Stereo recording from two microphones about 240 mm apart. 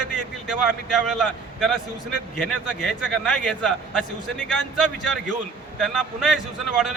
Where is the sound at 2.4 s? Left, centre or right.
Centre.